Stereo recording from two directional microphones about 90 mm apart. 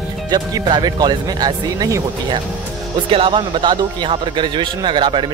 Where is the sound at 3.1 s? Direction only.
70° right (ahead or behind).